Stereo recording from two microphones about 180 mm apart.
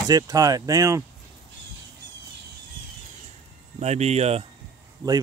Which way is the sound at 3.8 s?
40° right (ahead or behind).